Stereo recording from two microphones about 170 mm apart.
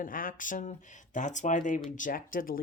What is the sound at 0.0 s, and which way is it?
Speech, 55° left (ahead or behind).